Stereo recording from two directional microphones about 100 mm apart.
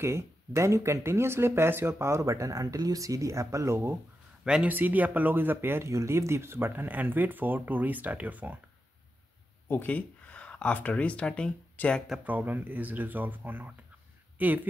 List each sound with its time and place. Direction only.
0.0 s speech: 30° right (ahead or behind)
4.5 s speech: 15° right (ahead or behind)
9.7 s speech: 15° left (ahead or behind)
12.3 s speech: 15° right (ahead or behind)